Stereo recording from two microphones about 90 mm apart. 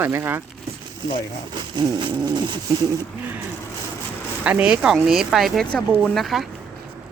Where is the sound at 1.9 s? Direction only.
55° right (ahead or behind).